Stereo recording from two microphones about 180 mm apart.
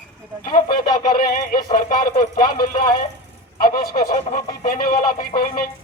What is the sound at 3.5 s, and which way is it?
Speech, 55° left (ahead or behind).